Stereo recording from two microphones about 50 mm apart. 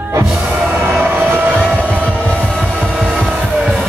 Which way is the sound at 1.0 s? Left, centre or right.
Right.